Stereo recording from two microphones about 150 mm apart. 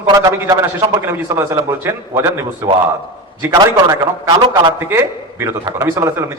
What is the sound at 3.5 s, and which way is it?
A man's voice, 25° right (ahead or behind).